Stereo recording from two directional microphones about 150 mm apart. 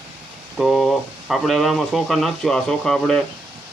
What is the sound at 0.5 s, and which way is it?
Speech, centre (ahead or behind).